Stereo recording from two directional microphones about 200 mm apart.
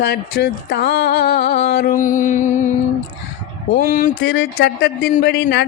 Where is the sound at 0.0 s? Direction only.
55° left (ahead or behind); by 2.5 s 40° left (ahead or behind).